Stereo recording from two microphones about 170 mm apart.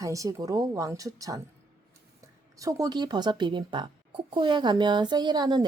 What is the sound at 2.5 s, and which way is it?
Speech, 20° right (ahead or behind).